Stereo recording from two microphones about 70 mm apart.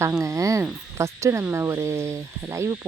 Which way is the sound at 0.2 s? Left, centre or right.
Right.